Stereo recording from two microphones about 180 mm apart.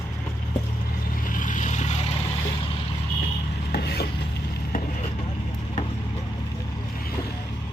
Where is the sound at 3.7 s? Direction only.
60° left (ahead or behind).